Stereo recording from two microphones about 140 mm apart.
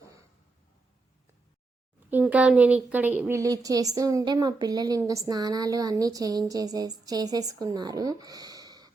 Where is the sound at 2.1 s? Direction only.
10° right (ahead or behind).